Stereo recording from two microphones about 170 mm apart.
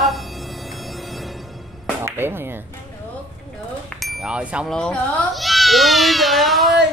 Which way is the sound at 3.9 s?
Centre (ahead or behind).